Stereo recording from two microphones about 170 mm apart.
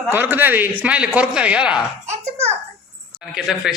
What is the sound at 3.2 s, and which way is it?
Speech, centre (ahead or behind).